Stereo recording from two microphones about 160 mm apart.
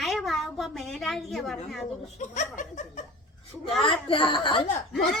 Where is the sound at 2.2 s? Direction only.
50° left (ahead or behind).